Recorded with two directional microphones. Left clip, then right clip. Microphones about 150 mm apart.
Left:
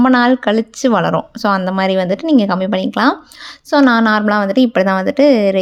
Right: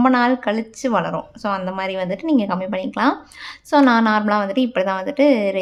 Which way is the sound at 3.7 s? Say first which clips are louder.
Left 3 dB; 25° left (ahead or behind).